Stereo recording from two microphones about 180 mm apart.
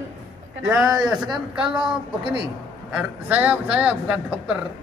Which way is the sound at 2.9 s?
5° right (ahead or behind).